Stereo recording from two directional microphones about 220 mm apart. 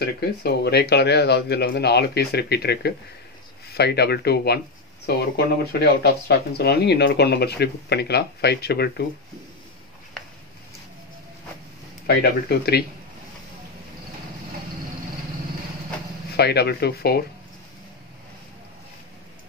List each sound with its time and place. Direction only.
0.0 s speech: 45° left (ahead or behind)
12.1 s speech: 45° left (ahead or behind)
16.3 s speech: 45° left (ahead or behind)